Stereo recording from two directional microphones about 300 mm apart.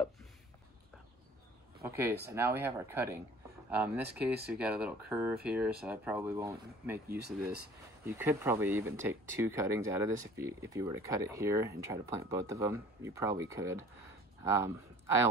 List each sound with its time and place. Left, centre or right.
1.8 s speech: centre
7.1 s speech: right
8.0 s speech: centre